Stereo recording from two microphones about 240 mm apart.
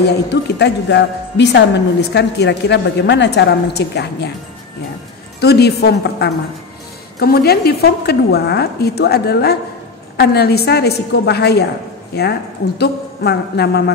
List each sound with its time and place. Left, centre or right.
0.0 s a woman's voice: left
5.4 s a woman's voice: left